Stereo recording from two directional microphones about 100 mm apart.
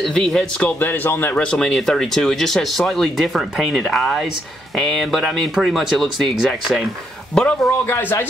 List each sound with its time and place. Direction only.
0.0 s speech: 5° left (ahead or behind)
0.7 s speech: 20° left (ahead or behind)
7.8 s speech: 20° left (ahead or behind)